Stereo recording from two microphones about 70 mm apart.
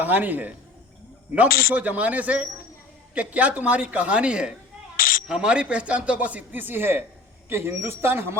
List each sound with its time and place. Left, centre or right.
0.0 s a man's voice: right